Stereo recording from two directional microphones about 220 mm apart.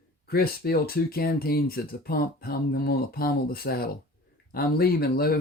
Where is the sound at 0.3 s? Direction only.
45° left (ahead or behind).